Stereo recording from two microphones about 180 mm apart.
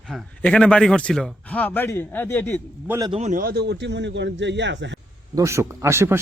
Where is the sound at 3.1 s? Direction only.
40° right (ahead or behind); by 4.9 s 80° right.